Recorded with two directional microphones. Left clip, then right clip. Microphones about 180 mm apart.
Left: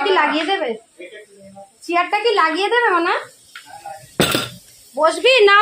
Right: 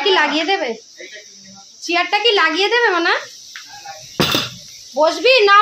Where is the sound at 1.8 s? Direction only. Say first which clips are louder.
Right 2 dB; 5° left (ahead or behind).